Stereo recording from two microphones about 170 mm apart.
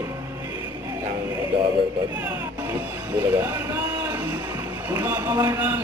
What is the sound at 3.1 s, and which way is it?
A man's voice, 15° right (ahead or behind).